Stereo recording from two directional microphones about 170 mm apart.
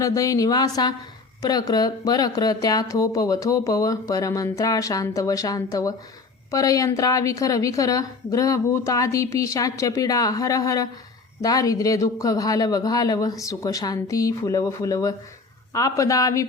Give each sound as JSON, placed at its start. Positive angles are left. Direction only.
{"t": 0.0, "sound": "speech", "side_deg": 20}